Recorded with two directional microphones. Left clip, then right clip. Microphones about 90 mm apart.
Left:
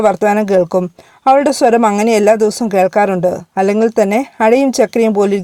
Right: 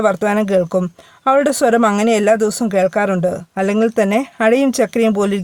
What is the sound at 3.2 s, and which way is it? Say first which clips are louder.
Speech: left 4 dB; 25° left (ahead or behind).